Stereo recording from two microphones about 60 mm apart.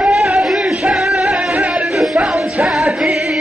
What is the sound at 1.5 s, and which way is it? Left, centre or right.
Music, centre.